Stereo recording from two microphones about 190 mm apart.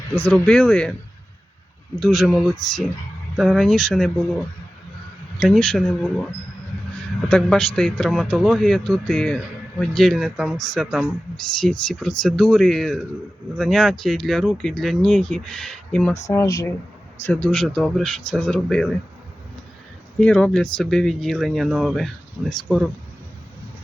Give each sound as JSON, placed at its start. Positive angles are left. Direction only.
{"t": 0.3, "sound": "speech", "side_deg": 5}
{"t": 2.0, "sound": "speech", "side_deg": 0}
{"t": 5.4, "sound": "speech", "side_deg": 5}
{"t": 7.3, "sound": "speech", "side_deg": 5}
{"t": 16.2, "sound": "speech", "side_deg": 15}
{"t": 17.2, "sound": "speech", "side_deg": 5}
{"t": 20.1, "sound": "speech", "side_deg": 5}